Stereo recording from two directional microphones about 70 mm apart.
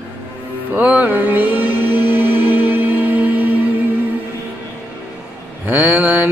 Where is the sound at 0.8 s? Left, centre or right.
Right.